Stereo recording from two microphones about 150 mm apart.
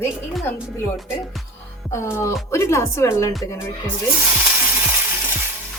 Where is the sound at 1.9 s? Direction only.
15° left (ahead or behind).